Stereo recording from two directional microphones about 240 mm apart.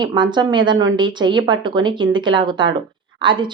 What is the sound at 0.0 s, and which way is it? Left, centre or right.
Speech, centre.